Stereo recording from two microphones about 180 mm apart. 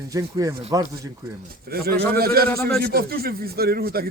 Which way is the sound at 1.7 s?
60° right (ahead or behind).